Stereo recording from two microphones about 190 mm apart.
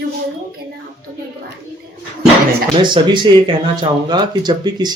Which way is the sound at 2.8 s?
25° right (ahead or behind).